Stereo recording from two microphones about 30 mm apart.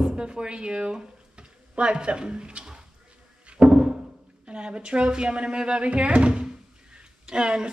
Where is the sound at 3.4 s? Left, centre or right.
Right.